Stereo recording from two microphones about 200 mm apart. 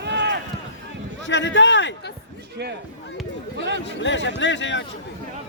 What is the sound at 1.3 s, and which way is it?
Speech, 65° left (ahead or behind).